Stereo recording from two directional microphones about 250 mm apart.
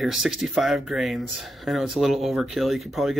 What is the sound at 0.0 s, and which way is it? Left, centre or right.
Speech, centre.